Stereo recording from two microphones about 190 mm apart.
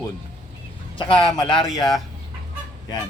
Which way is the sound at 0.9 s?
25° left (ahead or behind).